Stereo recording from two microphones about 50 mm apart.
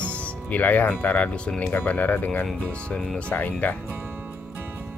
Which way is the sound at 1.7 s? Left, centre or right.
Left.